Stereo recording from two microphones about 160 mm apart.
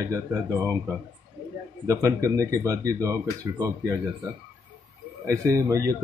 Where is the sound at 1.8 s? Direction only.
20° right (ahead or behind).